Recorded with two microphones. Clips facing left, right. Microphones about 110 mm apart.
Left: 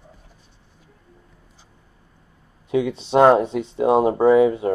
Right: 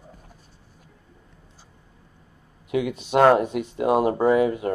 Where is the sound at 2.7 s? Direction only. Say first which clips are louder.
Left 3 dB; 30° left (ahead or behind).